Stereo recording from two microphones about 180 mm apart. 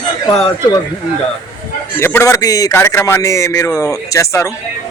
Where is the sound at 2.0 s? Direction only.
15° left (ahead or behind).